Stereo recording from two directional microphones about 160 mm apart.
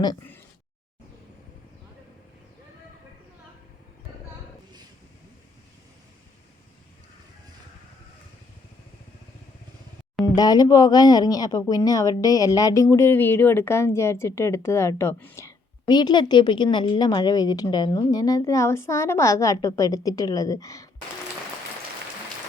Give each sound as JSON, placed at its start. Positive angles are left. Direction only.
{"t": 10.2, "sound": "speech", "side_deg": 25}